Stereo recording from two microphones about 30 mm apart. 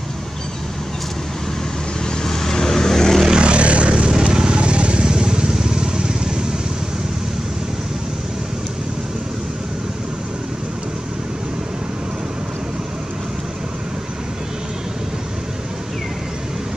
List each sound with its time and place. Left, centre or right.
2.2 s vehicle: centre
3.3 s vehicle: right
4.1 s vehicle: right
4.6 s vehicle: right
5.0 s vehicle: right